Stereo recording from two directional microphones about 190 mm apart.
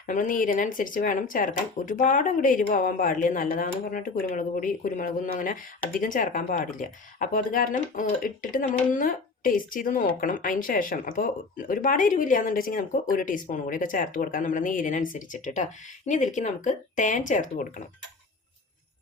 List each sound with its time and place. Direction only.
0.1 s speech: 45° left (ahead or behind)